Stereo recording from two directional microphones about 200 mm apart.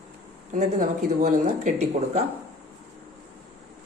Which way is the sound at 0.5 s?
40° right (ahead or behind).